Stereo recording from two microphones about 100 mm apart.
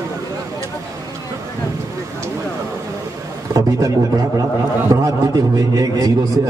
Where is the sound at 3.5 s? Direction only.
35° right (ahead or behind).